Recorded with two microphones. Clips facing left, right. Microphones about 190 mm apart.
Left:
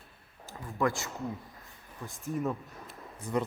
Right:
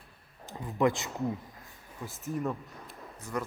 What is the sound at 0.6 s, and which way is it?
Speech, 20° right (ahead or behind).